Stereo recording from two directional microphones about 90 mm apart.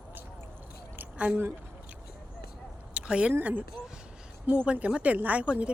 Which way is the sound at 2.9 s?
10° right (ahead or behind).